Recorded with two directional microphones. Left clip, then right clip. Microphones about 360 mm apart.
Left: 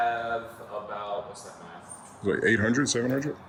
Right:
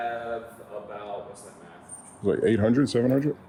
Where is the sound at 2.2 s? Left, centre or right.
Right.